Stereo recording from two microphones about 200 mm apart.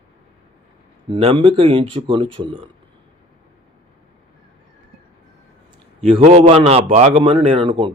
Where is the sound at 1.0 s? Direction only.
25° right (ahead or behind).